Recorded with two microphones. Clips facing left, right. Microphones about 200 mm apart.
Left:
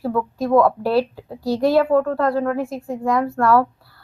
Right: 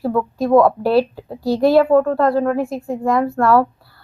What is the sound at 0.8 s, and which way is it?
Speech, 65° right (ahead or behind).